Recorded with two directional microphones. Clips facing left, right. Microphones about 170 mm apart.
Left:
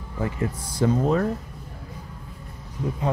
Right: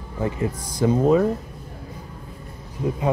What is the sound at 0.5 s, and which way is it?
Speech, 15° right (ahead or behind).